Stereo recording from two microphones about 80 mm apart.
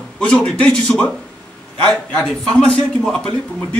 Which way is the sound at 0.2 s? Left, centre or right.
Centre.